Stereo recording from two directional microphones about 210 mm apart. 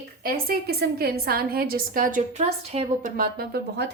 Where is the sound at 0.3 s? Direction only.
50° right (ahead or behind).